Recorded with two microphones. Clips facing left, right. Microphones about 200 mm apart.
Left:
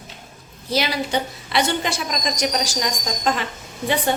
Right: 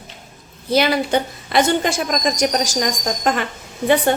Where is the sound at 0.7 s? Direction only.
55° right (ahead or behind).